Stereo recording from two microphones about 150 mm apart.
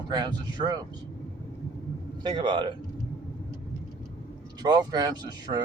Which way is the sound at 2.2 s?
30° right (ahead or behind).